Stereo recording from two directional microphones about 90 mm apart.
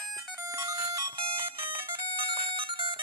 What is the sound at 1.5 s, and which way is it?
Music, 70° right (ahead or behind).